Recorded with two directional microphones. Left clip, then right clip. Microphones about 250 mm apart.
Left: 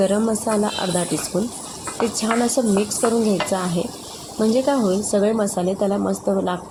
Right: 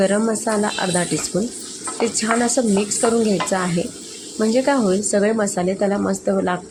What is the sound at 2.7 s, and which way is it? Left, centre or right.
Speech, centre.